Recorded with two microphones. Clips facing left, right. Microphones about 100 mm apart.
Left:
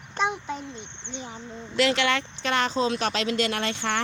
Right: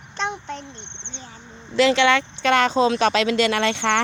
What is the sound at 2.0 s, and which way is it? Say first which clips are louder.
Speech: right 7 dB; 90° right.